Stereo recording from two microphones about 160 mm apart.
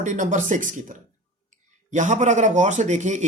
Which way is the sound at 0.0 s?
55° right (ahead or behind).